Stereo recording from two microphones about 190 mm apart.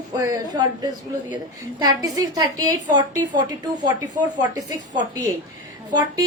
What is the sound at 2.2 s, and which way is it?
A woman's voice, 20° right (ahead or behind).